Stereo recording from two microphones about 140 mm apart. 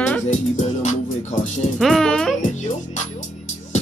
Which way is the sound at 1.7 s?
Centre (ahead or behind).